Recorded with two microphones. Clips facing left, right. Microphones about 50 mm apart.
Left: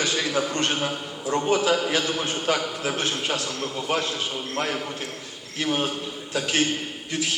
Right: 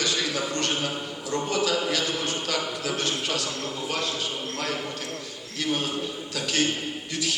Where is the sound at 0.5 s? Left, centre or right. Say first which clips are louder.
Left 2 dB; left.